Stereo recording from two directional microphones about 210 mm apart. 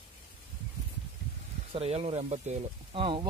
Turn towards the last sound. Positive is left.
turn(degrees=-25)  # may be behind; listen again after turning